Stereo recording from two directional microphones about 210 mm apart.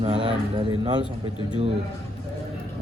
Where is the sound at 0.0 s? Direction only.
25° right (ahead or behind).